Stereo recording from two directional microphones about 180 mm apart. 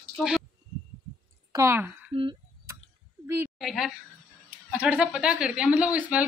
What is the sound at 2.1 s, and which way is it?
Speech, 30° right (ahead or behind).